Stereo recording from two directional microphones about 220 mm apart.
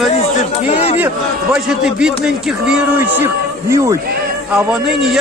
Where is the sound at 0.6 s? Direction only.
30° left (ahead or behind).